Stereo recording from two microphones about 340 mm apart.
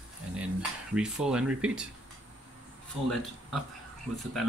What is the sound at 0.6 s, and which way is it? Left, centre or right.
Speech, centre.